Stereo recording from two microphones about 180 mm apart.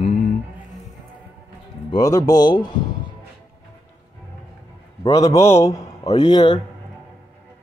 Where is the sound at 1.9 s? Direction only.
20° left (ahead or behind).